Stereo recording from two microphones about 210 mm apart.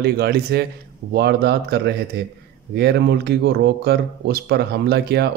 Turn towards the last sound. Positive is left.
turn(degrees=-50)  # may be behind; listen again after turning